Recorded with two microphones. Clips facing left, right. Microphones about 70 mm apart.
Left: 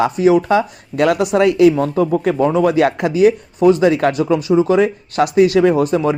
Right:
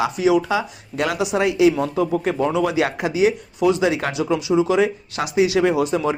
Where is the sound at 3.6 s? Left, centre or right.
Left.